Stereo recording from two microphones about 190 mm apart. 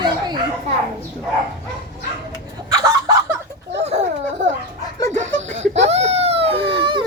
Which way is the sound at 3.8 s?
35° right (ahead or behind).